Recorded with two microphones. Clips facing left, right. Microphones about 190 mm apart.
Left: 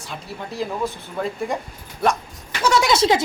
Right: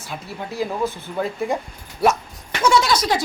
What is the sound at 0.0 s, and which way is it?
Speech, centre (ahead or behind).